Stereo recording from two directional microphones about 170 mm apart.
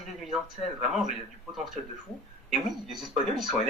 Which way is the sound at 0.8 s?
Centre (ahead or behind).